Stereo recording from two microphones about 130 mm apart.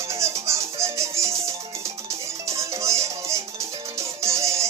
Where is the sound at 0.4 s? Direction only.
20° right (ahead or behind).